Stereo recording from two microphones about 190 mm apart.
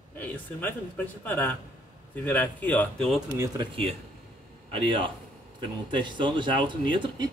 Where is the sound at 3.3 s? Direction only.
15° right (ahead or behind).